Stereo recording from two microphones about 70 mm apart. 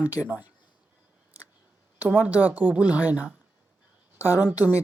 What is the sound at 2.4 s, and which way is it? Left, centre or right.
Speech, right.